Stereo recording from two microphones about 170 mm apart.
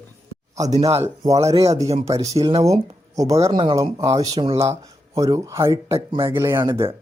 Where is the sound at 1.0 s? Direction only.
20° right (ahead or behind).